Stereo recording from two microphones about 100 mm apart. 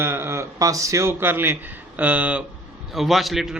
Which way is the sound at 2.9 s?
Centre (ahead or behind).